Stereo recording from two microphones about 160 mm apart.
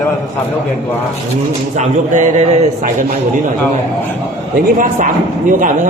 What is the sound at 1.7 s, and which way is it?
A man's voice, 50° right (ahead or behind).